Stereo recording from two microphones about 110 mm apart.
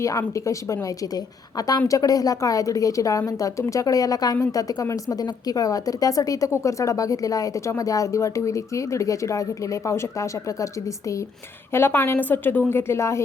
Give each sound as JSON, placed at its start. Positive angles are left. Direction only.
{"t": 0.0, "sound": "a woman's voice", "side_deg": 30}